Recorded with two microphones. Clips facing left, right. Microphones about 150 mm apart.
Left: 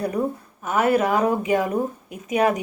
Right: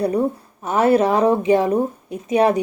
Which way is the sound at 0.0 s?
30° right (ahead or behind).